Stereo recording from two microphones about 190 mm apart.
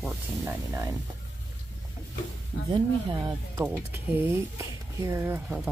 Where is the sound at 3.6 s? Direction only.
10° right (ahead or behind).